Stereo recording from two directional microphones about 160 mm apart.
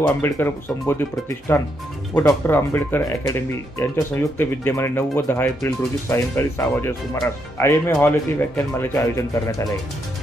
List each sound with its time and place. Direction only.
0.2 s speech: 15° left (ahead or behind)